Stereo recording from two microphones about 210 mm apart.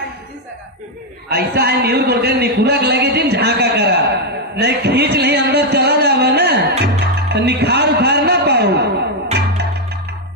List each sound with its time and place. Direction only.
1.3 s a man's voice: 50° right (ahead or behind)